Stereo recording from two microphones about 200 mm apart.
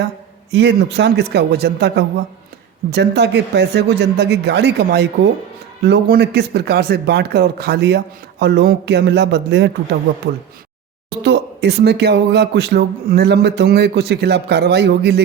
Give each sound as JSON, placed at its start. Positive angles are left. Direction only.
{"t": 0.5, "sound": "speech", "side_deg": -60}
{"t": 11.2, "sound": "speech", "side_deg": -55}